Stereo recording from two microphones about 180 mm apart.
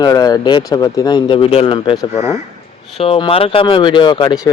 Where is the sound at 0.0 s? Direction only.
20° left (ahead or behind).